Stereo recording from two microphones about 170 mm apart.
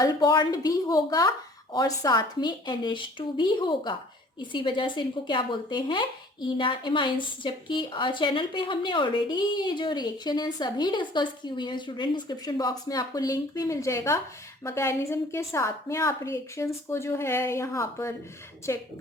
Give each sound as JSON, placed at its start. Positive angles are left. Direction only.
{"t": 0.0, "sound": "a woman's voice", "side_deg": 25}